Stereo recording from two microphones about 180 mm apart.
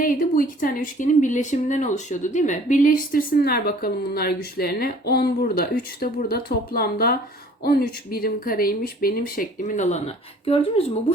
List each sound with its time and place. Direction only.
0.0 s speech: 50° left (ahead or behind); by 10.8 s 30° left (ahead or behind)